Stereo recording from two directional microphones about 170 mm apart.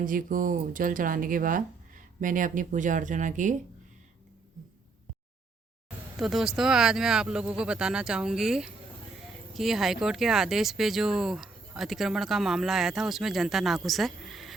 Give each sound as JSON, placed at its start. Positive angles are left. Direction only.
{"t": 0.0, "sound": "speech", "side_deg": -55}
{"t": 6.1, "sound": "speech", "side_deg": 0}